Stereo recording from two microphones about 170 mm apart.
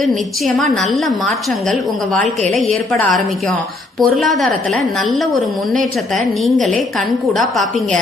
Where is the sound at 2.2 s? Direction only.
40° right (ahead or behind).